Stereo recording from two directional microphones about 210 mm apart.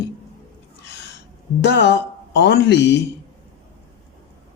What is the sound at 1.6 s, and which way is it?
Speech, 55° left (ahead or behind).